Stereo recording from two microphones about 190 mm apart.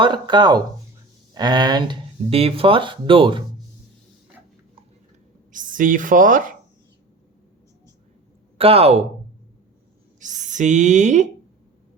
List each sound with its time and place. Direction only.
0.0 s speech: 25° right (ahead or behind)
5.5 s speech: 45° right (ahead or behind)
8.5 s speech: 30° right (ahead or behind)
10.2 s speech: 40° right (ahead or behind)